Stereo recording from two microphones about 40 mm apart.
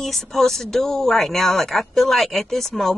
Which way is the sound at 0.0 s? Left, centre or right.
Centre.